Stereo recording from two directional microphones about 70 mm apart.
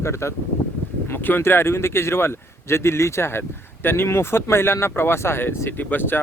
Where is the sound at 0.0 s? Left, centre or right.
Left.